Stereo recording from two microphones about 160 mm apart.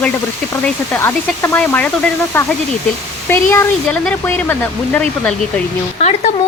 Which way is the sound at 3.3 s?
15° left (ahead or behind).